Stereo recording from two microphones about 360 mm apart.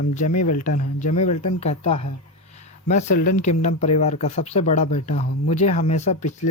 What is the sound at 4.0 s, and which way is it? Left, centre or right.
Speech, centre.